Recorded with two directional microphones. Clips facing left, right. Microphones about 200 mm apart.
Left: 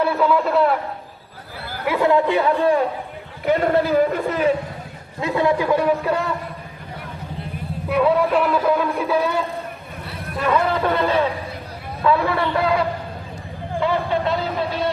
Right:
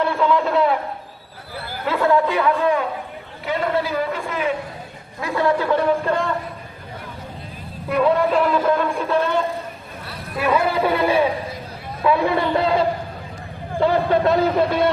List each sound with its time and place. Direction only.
0.0 s a man's voice: 5° left (ahead or behind)
1.8 s speech: 15° left (ahead or behind)
2.6 s a man's voice: 35° left (ahead or behind)
5.2 s a man's voice: 20° left (ahead or behind)
7.9 s speech: 5° left (ahead or behind)
10.3 s a man's voice: 10° right (ahead or behind); by 12.8 s 25° right (ahead or behind)
13.7 s a man's voice: 40° right (ahead or behind)